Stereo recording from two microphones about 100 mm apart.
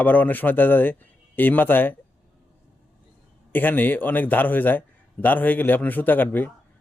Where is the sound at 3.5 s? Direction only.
20° left (ahead or behind).